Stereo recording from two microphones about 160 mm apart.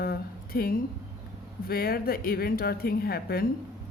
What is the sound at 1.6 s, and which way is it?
Speech, 70° left (ahead or behind).